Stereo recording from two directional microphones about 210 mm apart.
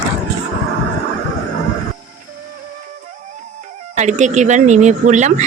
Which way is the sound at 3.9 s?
35° right (ahead or behind).